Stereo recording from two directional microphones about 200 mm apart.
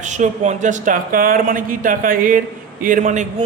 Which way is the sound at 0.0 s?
35° right (ahead or behind).